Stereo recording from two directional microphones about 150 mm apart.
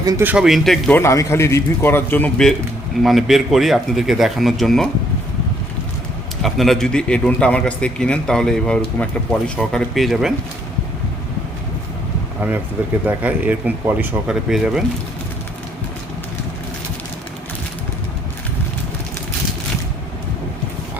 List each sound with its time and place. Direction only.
0.0 s speech: 25° right (ahead or behind)
0.3 s a man's voice: 5° right (ahead or behind)
0.9 s a man's voice: 20° left (ahead or behind); by 4.9 s centre (ahead or behind)
6.4 s a man's voice: centre (ahead or behind)
13.1 s speech: 10° right (ahead or behind)